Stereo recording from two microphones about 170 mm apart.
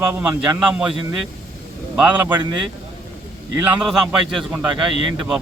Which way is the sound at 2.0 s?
10° right (ahead or behind).